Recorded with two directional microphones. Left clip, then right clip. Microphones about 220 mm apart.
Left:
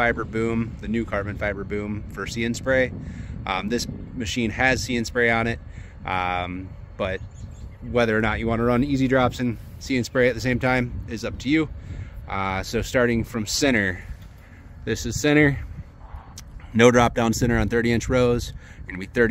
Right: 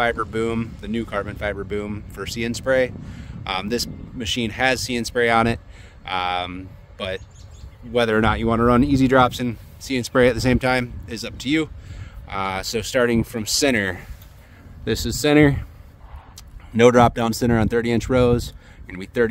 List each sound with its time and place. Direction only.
0.0 s speech: 20° right (ahead or behind)
4.4 s speech: 25° right (ahead or behind)
16.7 s speech: 10° right (ahead or behind)